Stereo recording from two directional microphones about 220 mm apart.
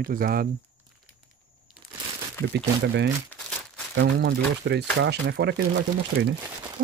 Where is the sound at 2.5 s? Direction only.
50° right (ahead or behind).